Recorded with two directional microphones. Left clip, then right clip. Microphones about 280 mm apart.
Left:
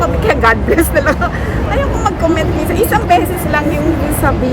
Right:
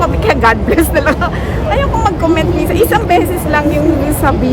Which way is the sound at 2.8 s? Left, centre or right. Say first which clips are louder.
Even; right.